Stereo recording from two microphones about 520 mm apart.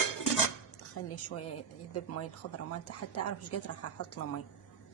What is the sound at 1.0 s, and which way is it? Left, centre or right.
A woman's voice, left.